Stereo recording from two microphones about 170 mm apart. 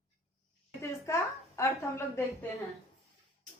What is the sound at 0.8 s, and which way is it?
A woman's voice, 15° left (ahead or behind).